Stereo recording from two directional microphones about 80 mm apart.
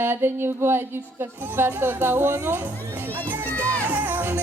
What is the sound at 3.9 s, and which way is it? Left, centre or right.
Music, right.